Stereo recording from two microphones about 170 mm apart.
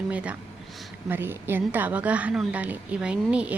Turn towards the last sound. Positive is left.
turn(degrees=-5)  # may be behind; listen again after turning